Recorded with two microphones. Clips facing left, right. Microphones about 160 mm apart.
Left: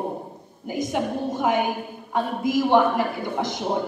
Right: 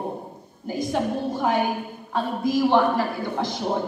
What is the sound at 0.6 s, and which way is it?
A man's voice, 15° left (ahead or behind).